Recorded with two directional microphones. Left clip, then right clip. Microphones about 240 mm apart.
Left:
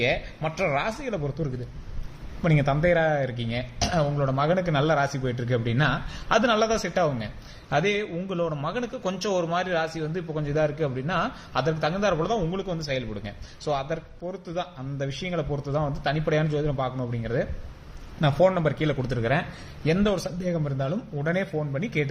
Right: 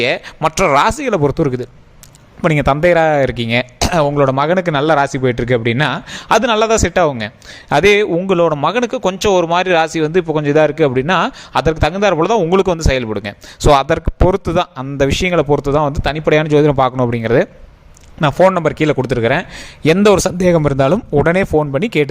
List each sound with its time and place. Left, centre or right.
0.0 s a man's voice: right